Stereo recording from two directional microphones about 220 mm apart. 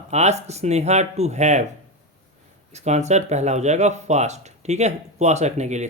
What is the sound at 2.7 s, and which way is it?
Speech, 30° right (ahead or behind).